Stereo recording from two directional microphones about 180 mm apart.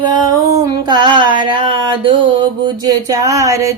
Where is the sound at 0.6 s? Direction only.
25° right (ahead or behind).